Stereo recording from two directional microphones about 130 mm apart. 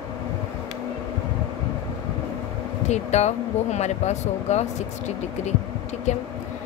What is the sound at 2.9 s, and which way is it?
A woman's voice, 60° left (ahead or behind).